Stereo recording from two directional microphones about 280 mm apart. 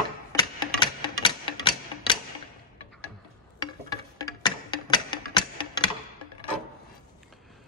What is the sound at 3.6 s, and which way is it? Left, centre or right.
Music, centre.